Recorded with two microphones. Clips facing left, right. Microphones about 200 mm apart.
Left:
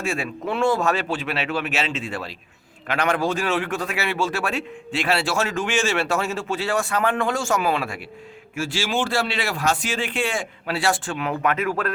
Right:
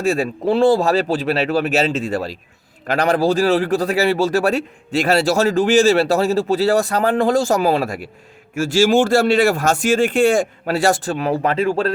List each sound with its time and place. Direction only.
0.0 s a man's voice: 35° right (ahead or behind)